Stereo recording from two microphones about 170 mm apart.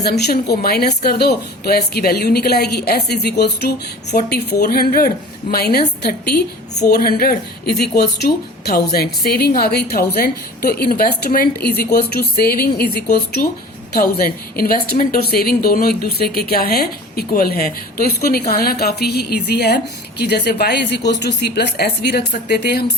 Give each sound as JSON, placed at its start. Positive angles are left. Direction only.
{"t": 0.0, "sound": "a woman's voice", "side_deg": 70}
{"t": 4.6, "sound": "a woman's voice", "side_deg": 60}